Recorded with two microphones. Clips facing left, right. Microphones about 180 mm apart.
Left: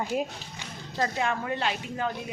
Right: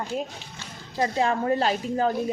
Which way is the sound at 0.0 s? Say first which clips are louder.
Left 1 dB; 5° left (ahead or behind).